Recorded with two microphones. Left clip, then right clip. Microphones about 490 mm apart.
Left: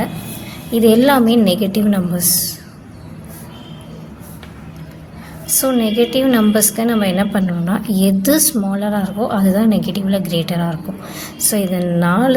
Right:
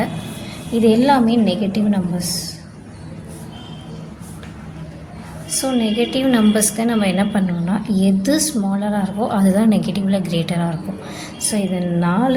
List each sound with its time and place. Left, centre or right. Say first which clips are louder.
0.8 s a woman's voice: left 3 dB; left
5.6 s a woman's voice: left 4 dB; left